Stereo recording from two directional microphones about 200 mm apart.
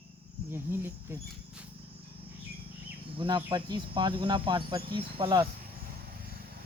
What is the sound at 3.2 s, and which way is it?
Speech, 25° right (ahead or behind).